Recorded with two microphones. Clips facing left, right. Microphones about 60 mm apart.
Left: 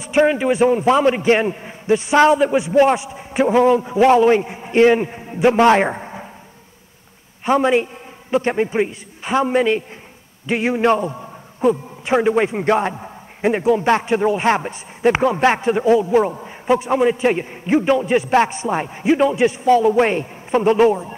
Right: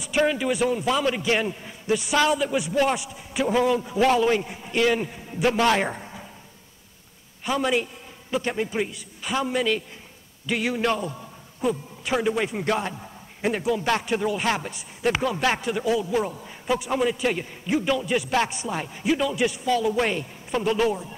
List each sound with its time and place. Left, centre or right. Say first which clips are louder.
0.0 s a man's voice: left 7 dB; left
7.4 s a man's voice: left 8 dB; left